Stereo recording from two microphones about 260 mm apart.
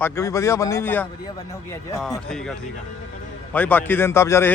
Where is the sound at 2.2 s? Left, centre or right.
Centre.